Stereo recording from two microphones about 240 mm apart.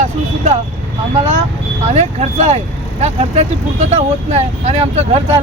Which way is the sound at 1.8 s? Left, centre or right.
Right.